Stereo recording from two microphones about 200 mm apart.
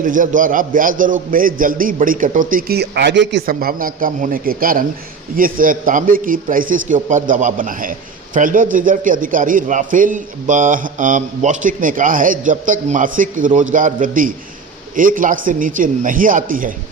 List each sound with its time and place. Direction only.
0.0 s a man's voice: 40° right (ahead or behind); by 3.4 s 60° right (ahead or behind)
3.4 s a man's voice: 45° right (ahead or behind)